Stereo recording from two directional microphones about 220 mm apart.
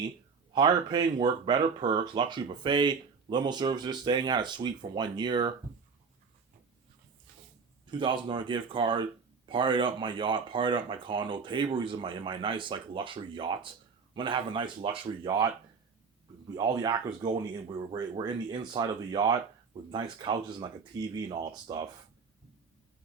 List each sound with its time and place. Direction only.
0.5 s speech: 20° right (ahead or behind)
7.9 s speech: 20° right (ahead or behind)
16.6 s speech: 20° right (ahead or behind)